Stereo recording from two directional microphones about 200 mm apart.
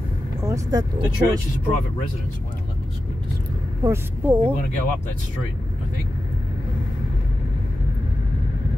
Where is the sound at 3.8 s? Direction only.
10° right (ahead or behind).